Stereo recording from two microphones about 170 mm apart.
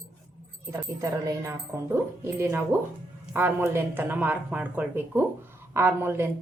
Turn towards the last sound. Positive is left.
turn(degrees=-15)  # may be behind; listen again after turning